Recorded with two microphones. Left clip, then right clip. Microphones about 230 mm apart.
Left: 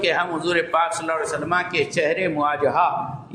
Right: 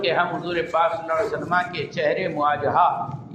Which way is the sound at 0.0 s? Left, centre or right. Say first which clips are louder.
Left 1 dB; left.